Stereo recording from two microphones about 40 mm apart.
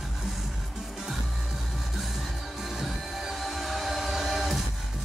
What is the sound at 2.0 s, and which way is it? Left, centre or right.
Music, centre.